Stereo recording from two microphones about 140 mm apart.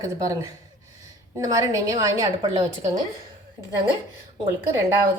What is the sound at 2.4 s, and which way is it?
Speech, 35° right (ahead or behind).